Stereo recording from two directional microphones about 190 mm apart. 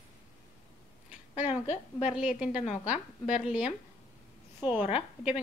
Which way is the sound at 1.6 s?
35° left (ahead or behind).